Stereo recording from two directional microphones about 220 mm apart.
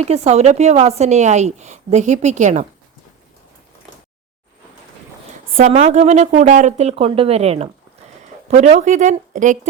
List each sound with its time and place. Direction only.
0.0 s a woman's voice: 30° right (ahead or behind)
5.5 s a woman's voice: 30° right (ahead or behind)